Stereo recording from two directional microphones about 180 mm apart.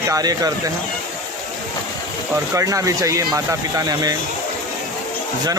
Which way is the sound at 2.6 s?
20° right (ahead or behind).